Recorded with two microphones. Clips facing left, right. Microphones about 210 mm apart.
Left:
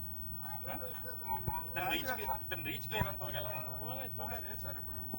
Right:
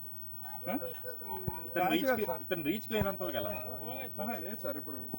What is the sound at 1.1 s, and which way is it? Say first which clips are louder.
Speech: right 7 dB; 30° right (ahead or behind).